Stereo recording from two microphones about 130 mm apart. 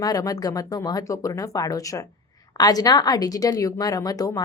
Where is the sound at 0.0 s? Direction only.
30° left (ahead or behind).